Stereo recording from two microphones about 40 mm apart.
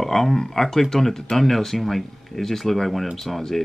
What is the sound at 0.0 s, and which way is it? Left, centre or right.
Speech, centre.